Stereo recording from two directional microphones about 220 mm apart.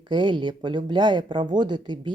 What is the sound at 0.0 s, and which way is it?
Speech, 20° right (ahead or behind).